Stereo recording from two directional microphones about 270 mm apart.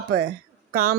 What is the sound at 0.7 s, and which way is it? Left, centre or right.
Speech, right.